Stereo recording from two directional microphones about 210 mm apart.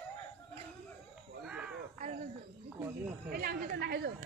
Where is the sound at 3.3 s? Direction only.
45° right (ahead or behind).